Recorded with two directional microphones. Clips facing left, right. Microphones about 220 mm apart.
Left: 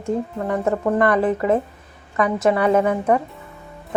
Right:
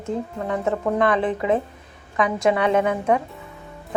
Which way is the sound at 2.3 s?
5° left (ahead or behind).